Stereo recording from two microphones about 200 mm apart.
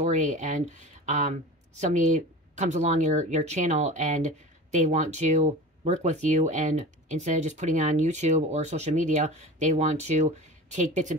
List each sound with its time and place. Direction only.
0.0 s speech: 35° right (ahead or behind)